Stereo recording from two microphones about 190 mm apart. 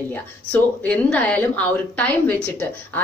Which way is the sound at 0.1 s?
10° left (ahead or behind).